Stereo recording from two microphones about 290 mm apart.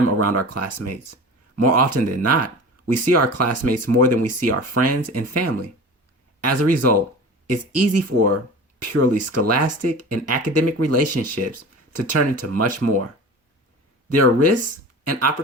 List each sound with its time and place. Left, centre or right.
0.2 s speech: right
14.1 s speech: right